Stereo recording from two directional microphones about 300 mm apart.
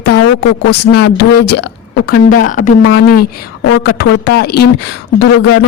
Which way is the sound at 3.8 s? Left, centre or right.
Left.